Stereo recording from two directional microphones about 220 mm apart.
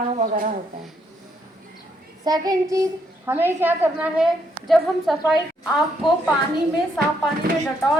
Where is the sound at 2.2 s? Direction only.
15° right (ahead or behind); by 5.2 s centre (ahead or behind).